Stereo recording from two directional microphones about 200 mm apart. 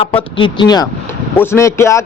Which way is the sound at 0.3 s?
25° left (ahead or behind).